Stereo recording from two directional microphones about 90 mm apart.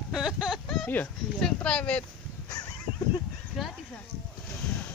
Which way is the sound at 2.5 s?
40° left (ahead or behind).